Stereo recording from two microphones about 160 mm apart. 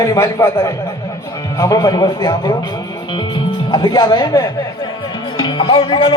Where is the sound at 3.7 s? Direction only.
30° left (ahead or behind).